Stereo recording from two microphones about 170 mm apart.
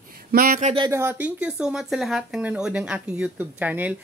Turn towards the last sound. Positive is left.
turn(degrees=-10)  # may be behind; listen again after turning